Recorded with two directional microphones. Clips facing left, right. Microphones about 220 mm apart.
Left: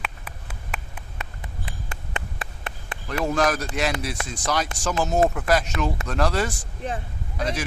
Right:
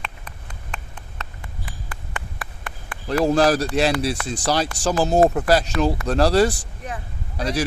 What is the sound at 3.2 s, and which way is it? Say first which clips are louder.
A man's voice: right 5 dB; 30° right (ahead or behind).